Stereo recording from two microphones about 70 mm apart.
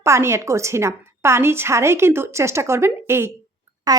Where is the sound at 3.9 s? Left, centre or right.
Right.